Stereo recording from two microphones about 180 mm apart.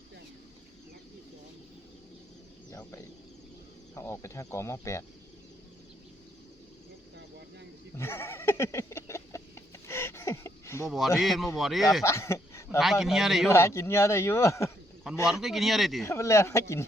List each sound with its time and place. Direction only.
3.9 s speech: 15° left (ahead or behind)
7.9 s a sound: 15° left (ahead or behind)
10.8 s speech: centre (ahead or behind)
12.0 s speech: 15° left (ahead or behind)
12.8 s speech: centre (ahead or behind)
13.5 s speech: 15° left (ahead or behind)
15.3 s speech: centre (ahead or behind)
16.0 s speech: 15° left (ahead or behind)